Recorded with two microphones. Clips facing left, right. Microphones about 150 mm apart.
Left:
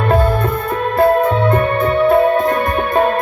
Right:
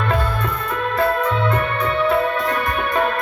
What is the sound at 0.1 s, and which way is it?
Music, 45° left (ahead or behind).